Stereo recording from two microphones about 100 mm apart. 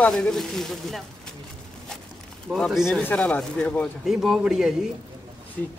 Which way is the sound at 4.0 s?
5° right (ahead or behind).